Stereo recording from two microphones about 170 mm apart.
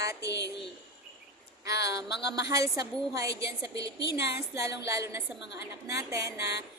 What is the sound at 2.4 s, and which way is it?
A woman's voice, 20° right (ahead or behind).